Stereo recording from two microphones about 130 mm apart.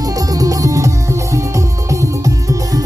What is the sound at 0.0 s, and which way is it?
Music, 25° right (ahead or behind).